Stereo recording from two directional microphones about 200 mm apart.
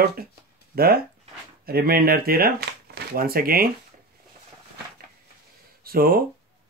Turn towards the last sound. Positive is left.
turn(degrees=-45)  # may be behind; listen again after turning